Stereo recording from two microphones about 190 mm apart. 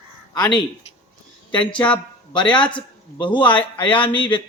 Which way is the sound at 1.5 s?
5° left (ahead or behind).